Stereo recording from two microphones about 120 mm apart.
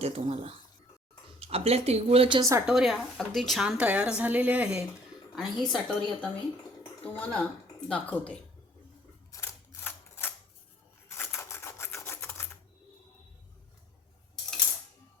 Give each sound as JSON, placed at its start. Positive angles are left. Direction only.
{"t": 0.0, "sound": "speech", "side_deg": -55}
{"t": 2.4, "sound": "a woman's voice", "side_deg": -25}
{"t": 2.6, "sound": "a woman's voice", "side_deg": 0}
{"t": 9.3, "sound": "a sound", "side_deg": 20}